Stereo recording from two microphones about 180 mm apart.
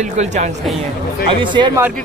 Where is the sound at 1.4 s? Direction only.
25° right (ahead or behind).